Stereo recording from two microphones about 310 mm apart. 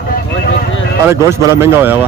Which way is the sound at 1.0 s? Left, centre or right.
Centre.